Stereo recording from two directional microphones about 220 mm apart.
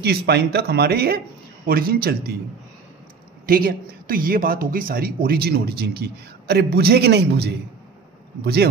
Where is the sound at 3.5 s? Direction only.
40° right (ahead or behind).